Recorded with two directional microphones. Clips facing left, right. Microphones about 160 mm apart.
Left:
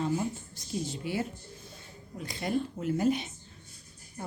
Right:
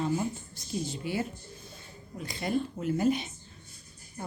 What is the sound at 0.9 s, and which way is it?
Speech, centre (ahead or behind).